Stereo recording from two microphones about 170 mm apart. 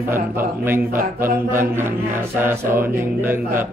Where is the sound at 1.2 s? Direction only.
15° right (ahead or behind).